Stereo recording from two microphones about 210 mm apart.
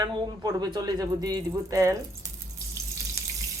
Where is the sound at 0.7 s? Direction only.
15° right (ahead or behind).